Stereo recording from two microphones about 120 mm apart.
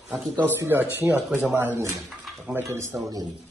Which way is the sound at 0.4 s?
15° right (ahead or behind).